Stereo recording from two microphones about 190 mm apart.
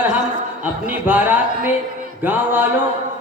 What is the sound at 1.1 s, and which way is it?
A man's voice, 10° right (ahead or behind).